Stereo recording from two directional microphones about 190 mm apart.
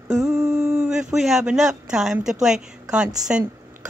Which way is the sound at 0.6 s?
5° right (ahead or behind).